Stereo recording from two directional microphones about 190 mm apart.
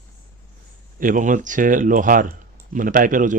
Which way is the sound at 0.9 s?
45° right (ahead or behind).